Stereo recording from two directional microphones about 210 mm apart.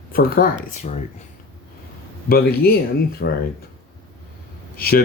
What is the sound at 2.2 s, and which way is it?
Speech, 45° left (ahead or behind).